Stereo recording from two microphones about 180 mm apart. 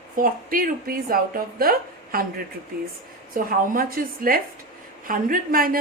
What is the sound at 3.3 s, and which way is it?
A woman's voice, 50° right (ahead or behind).